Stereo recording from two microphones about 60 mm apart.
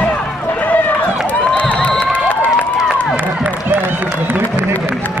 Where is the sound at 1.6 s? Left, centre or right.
Left.